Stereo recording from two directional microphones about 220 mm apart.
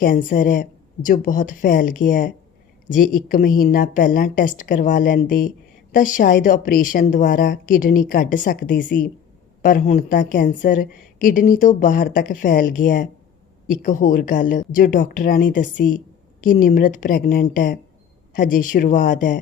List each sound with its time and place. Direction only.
0.0 s a woman's voice: 40° left (ahead or behind)